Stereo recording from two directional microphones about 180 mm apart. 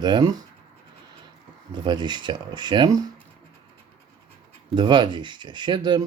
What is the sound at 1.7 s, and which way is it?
Speech, 25° right (ahead or behind).